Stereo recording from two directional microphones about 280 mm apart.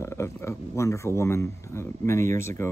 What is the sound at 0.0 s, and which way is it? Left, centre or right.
Speech, centre.